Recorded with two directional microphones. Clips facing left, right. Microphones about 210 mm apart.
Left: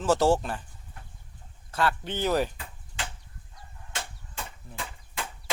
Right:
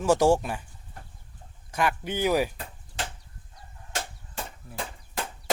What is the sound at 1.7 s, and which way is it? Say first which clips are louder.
Speech: right 1 dB; 15° right (ahead or behind).